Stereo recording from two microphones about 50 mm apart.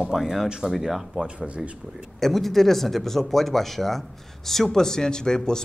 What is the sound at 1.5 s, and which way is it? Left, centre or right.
Speech, right.